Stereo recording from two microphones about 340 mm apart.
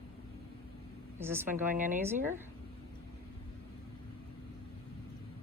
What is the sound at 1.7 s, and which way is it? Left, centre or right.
Speech, right.